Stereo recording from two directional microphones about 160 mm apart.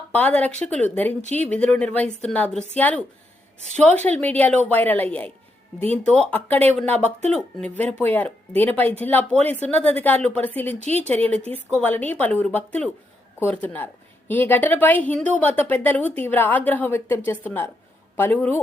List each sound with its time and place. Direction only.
0.1 s a woman's voice: 10° left (ahead or behind)
1.2 s speech: 45° right (ahead or behind)
1.5 s a woman's voice: 10° left (ahead or behind)